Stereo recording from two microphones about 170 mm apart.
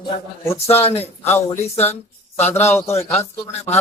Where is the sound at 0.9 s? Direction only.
40° left (ahead or behind).